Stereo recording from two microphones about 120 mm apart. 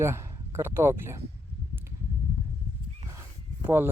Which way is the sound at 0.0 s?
20° right (ahead or behind).